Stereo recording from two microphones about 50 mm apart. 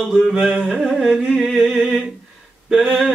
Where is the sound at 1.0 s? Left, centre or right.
Centre.